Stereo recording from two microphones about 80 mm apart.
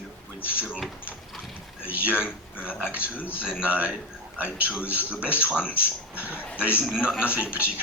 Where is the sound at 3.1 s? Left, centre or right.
Left.